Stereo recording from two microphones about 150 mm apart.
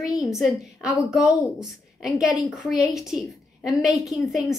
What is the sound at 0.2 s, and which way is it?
A woman's voice, centre (ahead or behind).